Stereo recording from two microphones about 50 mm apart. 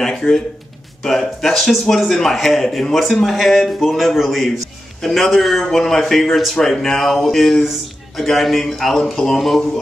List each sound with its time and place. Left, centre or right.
1.0 s a man's voice: centre
6.5 s speech: centre
6.8 s a man's voice: centre